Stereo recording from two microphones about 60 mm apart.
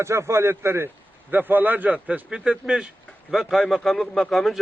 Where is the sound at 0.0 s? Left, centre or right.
Right.